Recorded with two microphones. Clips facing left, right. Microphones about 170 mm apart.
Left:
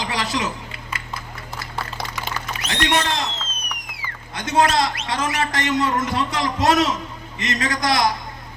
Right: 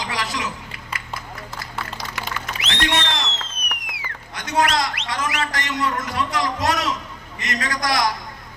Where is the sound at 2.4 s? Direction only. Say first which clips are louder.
Left 1 dB; 40° left (ahead or behind).